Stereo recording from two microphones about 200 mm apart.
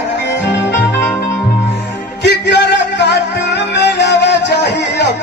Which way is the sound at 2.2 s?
60° left (ahead or behind).